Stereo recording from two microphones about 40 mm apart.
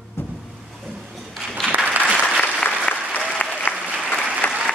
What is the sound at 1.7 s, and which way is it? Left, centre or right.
Applause, right.